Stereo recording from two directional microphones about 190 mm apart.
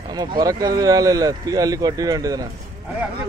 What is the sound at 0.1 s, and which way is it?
Speech, 20° right (ahead or behind).